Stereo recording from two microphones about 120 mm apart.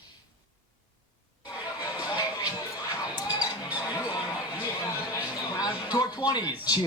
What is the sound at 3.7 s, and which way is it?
Music, 10° right (ahead or behind).